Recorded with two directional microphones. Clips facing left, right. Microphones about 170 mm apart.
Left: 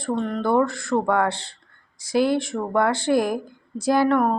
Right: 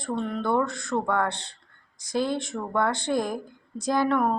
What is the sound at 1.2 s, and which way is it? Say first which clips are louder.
A woman's voice: left 4 dB; 90° left.